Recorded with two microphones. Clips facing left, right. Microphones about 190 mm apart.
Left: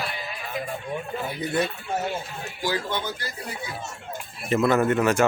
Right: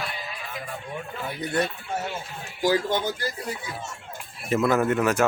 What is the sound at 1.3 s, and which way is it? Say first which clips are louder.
Speech: even; 5° left (ahead or behind).